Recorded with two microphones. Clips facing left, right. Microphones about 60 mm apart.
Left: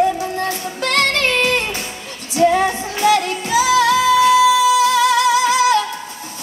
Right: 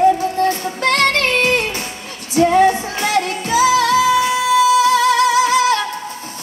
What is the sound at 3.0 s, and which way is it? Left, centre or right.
Music, right.